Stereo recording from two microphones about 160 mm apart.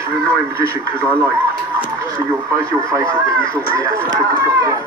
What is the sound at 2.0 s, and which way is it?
Speech, 20° right (ahead or behind).